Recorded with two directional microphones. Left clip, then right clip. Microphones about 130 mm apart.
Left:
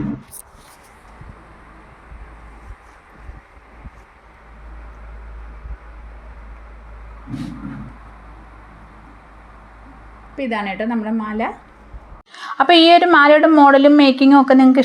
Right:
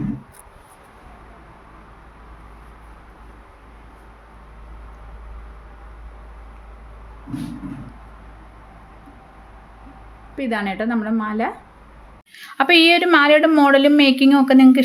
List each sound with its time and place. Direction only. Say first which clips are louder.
10.3 s a woman's voice: left 1 dB; 30° right (ahead or behind)
12.5 s a woman's voice: left 3 dB; 5° right (ahead or behind)